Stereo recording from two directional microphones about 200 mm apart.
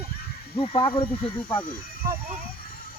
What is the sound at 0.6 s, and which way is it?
Speech, 25° left (ahead or behind).